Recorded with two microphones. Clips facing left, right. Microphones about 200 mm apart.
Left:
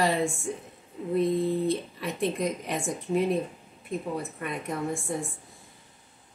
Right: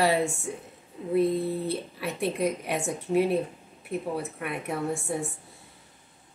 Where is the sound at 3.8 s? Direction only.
5° right (ahead or behind).